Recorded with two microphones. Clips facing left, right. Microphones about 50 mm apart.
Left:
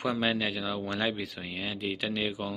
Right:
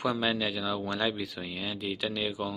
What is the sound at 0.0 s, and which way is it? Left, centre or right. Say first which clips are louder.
Speech: even; left.